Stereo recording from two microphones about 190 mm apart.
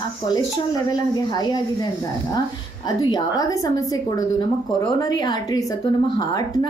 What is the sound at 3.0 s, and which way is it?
Speech, 20° left (ahead or behind).